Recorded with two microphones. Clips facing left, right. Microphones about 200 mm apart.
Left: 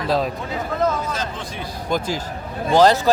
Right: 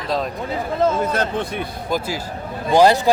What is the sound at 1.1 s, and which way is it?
Speech, 60° right (ahead or behind).